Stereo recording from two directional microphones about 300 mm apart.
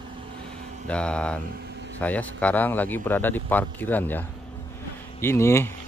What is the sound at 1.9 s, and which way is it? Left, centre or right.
Speech, centre.